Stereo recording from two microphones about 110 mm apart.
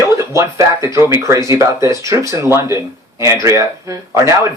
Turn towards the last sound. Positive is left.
turn(degrees=-25)  # may be behind; listen again after turning